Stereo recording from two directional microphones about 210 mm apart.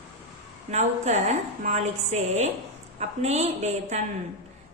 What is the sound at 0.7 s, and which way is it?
A woman's voice, 35° right (ahead or behind).